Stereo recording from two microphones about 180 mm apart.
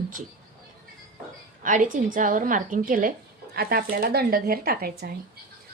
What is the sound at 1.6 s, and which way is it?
Speech, 45° right (ahead or behind).